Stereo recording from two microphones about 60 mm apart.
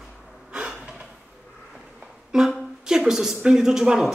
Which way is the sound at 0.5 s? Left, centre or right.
Centre.